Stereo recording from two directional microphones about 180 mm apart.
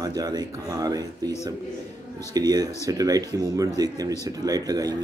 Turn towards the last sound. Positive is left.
turn(degrees=-20)  # may be behind; listen again after turning